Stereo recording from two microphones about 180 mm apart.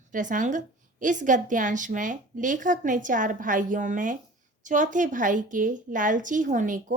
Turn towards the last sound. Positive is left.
turn(degrees=-45)  # may be behind; listen again after turning